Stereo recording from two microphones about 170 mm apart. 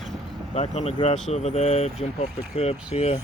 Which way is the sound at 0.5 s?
40° left (ahead or behind).